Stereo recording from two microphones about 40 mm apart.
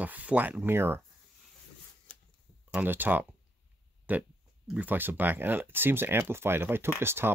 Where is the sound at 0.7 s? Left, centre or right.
Right.